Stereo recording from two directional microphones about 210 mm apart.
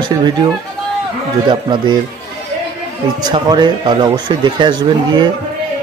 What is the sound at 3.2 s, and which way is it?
Speech, 20° right (ahead or behind).